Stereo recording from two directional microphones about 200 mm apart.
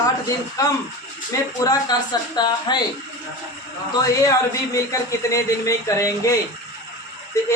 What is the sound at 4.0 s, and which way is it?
Speech, 15° left (ahead or behind).